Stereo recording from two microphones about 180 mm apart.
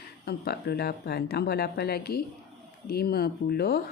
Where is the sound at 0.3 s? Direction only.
60° left (ahead or behind).